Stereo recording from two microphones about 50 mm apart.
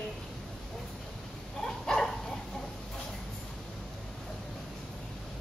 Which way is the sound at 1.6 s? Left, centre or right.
Centre.